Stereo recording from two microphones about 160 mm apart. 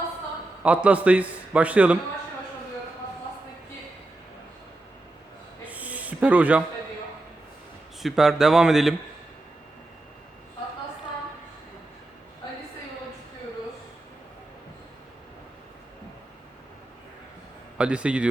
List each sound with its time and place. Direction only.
0.6 s a man's voice: 10° right (ahead or behind)
5.6 s a sound: 10° right (ahead or behind)
8.0 s speech: centre (ahead or behind)
17.7 s a man's voice: 5° right (ahead or behind)